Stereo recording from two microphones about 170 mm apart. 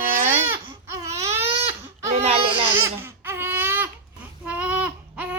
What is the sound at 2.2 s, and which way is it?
Baby cry, 35° right (ahead or behind).